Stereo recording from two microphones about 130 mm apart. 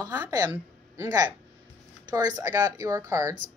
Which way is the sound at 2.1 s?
30° right (ahead or behind).